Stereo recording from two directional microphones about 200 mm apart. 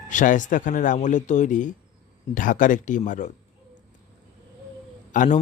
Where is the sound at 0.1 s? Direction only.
40° left (ahead or behind).